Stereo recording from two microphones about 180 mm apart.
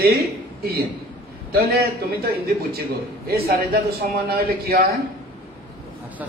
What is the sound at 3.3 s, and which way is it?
Speech, 55° right (ahead or behind).